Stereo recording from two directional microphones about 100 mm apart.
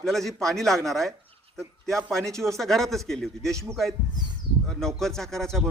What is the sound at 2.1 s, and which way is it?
A man's voice, 5° left (ahead or behind).